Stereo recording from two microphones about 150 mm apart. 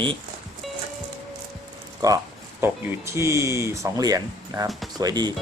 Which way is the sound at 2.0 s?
20° right (ahead or behind).